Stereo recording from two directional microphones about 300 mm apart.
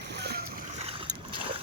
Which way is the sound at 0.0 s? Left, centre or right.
Right.